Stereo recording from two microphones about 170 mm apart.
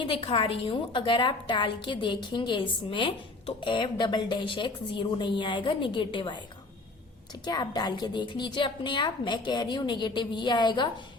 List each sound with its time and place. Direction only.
0.0 s a woman's voice: 30° left (ahead or behind)
7.4 s a woman's voice: 25° left (ahead or behind)